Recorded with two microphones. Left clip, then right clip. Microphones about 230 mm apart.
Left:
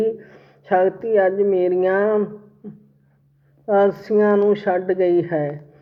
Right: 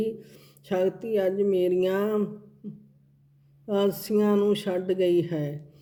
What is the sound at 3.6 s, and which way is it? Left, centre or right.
Speech, right.